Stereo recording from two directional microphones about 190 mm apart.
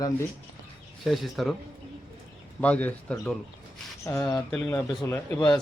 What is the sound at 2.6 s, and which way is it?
A man's voice, 10° left (ahead or behind).